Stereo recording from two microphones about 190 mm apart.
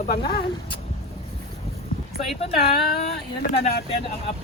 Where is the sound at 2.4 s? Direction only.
35° left (ahead or behind).